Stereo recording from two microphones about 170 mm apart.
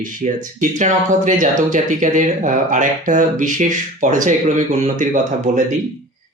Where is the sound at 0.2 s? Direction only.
45° right (ahead or behind).